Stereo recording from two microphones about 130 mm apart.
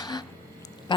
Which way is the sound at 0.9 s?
35° left (ahead or behind).